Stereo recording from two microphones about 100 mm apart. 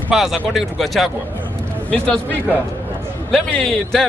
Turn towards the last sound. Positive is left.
turn(degrees=10)  # may be behind; listen again after turning